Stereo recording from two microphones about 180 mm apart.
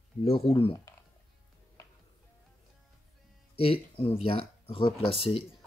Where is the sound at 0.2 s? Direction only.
30° left (ahead or behind).